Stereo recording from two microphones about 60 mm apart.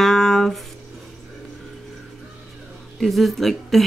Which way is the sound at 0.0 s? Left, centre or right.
Centre.